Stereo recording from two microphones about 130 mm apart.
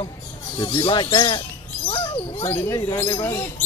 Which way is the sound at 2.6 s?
20° left (ahead or behind).